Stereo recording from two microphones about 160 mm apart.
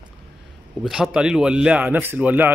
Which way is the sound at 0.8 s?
5° right (ahead or behind).